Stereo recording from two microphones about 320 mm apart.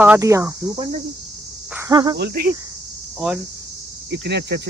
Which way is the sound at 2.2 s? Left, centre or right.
Right.